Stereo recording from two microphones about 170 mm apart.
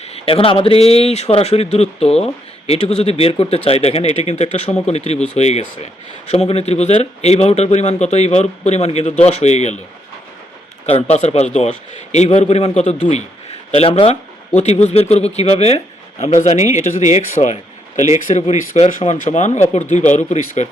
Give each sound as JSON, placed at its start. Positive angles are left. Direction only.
{"t": 0.0, "sound": "a man's voice", "side_deg": 35}
{"t": 10.8, "sound": "a man's voice", "side_deg": 40}